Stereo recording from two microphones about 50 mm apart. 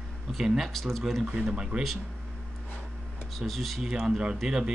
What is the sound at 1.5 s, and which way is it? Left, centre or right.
Speech, centre.